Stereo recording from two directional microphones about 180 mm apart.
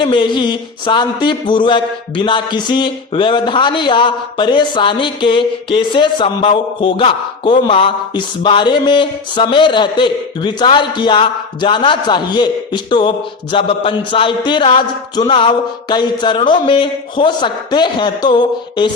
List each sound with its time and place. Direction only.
0.0 s speech: 25° left (ahead or behind)